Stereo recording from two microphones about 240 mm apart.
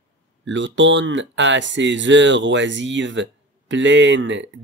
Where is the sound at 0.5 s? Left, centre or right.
Right.